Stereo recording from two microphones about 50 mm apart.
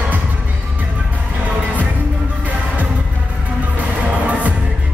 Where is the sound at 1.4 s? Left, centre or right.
Right.